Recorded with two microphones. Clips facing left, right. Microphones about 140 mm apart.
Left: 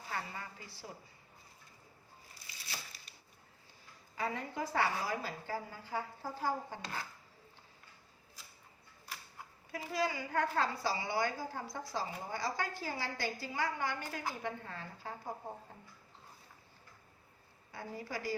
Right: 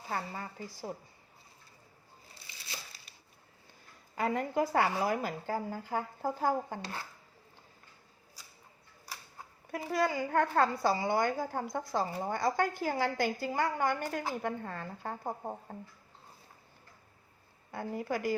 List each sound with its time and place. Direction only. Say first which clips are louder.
0.1 s a woman's voice: right 5 dB; 40° right (ahead or behind)
4.1 s a woman's voice: right 7 dB; 55° right (ahead or behind)
9.7 s a woman's voice: right 5 dB; 50° right (ahead or behind)
17.7 s speech: right 8 dB; 55° right (ahead or behind)